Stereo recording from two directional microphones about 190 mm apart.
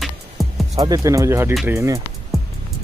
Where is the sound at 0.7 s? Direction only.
20° right (ahead or behind).